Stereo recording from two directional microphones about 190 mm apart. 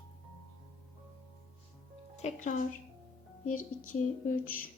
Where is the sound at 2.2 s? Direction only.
40° left (ahead or behind).